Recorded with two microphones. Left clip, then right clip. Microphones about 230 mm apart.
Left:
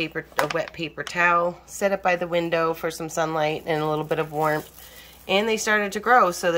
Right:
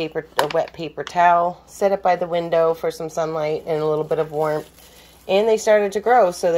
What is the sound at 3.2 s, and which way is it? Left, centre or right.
Speech, left.